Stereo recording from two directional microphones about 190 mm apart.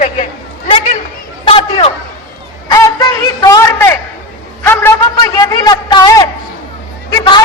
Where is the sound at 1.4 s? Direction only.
30° left (ahead or behind).